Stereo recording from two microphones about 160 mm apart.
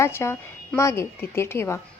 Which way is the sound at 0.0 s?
15° left (ahead or behind).